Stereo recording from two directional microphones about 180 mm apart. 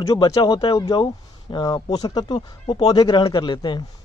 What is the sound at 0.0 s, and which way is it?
Speech, 20° left (ahead or behind).